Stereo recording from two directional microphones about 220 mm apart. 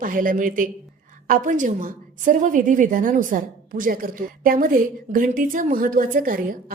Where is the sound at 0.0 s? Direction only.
40° right (ahead or behind).